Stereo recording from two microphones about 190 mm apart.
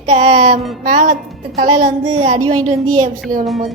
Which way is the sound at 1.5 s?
35° right (ahead or behind).